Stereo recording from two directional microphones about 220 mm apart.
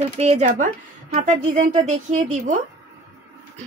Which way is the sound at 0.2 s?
30° right (ahead or behind).